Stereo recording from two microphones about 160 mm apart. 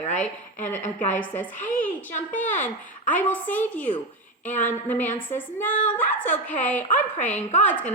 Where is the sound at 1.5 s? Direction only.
50° left (ahead or behind).